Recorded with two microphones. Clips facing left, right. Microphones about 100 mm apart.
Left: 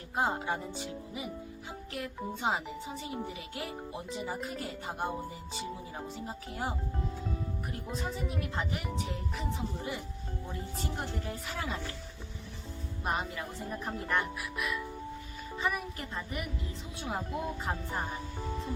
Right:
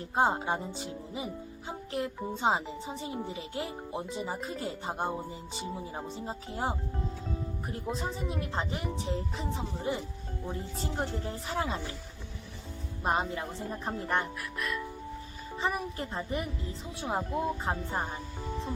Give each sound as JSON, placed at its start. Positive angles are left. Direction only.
{"t": 0.2, "sound": "speech", "side_deg": -30}
{"t": 13.1, "sound": "speech", "side_deg": -25}
{"t": 14.6, "sound": "music", "side_deg": 10}
{"t": 15.5, "sound": "speech", "side_deg": -30}